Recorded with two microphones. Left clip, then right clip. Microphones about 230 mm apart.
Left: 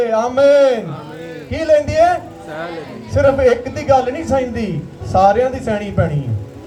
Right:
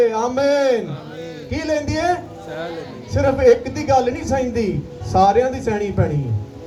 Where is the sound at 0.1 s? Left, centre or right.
Right.